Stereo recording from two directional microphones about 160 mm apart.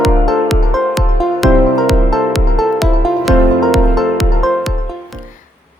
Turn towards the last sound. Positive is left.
turn(degrees=0)  # may be behind; listen again after turning